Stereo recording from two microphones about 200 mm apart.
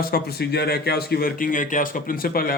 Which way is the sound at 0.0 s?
50° left (ahead or behind).